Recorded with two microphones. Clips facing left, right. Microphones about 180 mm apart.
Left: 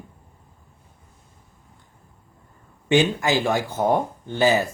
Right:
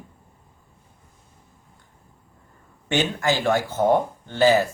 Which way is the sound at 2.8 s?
15° left (ahead or behind).